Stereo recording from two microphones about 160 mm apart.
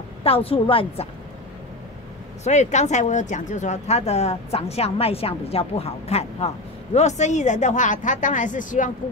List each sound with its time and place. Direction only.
0.2 s a woman's voice: 35° left (ahead or behind)
2.4 s speech: 45° left (ahead or behind)